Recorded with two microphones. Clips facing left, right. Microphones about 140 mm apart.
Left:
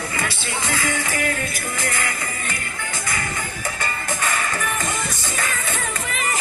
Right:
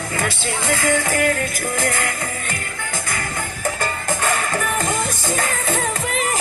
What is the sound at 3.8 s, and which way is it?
Music, 45° right (ahead or behind).